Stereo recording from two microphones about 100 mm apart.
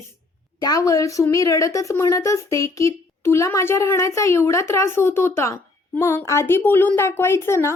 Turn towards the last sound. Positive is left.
turn(degrees=25)  # may be behind; listen again after turning